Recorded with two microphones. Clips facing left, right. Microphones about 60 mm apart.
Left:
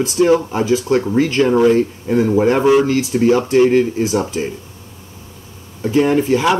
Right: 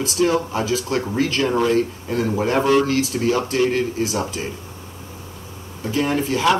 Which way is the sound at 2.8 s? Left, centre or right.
Left.